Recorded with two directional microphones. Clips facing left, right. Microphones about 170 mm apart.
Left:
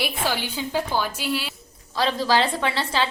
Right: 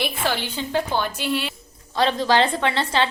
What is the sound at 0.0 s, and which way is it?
A woman's voice, 10° left (ahead or behind).